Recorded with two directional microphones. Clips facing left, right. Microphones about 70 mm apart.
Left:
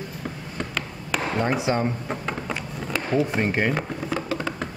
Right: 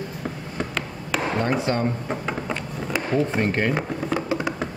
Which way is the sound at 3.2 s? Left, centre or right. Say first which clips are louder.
Even; centre.